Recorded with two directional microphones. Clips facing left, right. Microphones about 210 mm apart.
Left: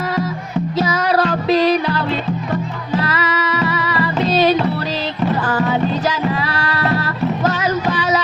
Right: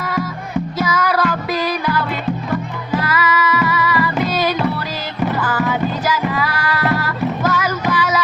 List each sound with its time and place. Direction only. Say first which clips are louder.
0.8 s music: left 2 dB; 30° left (ahead or behind)